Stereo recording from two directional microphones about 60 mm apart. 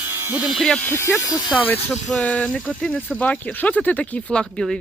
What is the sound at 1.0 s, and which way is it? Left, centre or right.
Speech, left.